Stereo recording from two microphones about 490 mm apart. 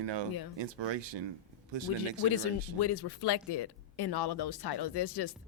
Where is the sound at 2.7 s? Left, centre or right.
Left.